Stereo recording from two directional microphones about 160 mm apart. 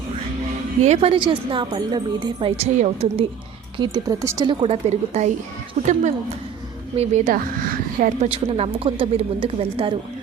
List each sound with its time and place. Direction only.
0.8 s a woman's voice: 40° right (ahead or behind)
3.8 s speech: 25° right (ahead or behind)
4.6 s a woman's voice: 40° right (ahead or behind); by 8.3 s 60° right (ahead or behind)
8.3 s a woman's voice: 40° right (ahead or behind)